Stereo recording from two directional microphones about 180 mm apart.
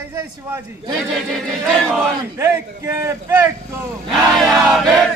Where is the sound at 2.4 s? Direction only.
15° right (ahead or behind).